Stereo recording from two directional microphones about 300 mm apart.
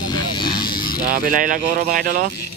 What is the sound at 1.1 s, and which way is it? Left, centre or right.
Speech, right.